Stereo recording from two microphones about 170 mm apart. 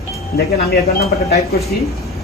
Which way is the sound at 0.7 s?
65° left (ahead or behind).